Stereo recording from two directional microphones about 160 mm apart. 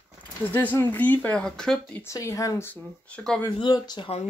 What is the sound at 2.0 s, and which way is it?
Speech, 20° left (ahead or behind).